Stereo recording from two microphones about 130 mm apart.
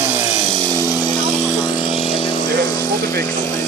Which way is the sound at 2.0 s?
45° left (ahead or behind).